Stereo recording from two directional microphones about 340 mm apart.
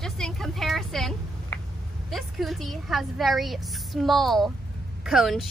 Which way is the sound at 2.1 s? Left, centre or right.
Centre.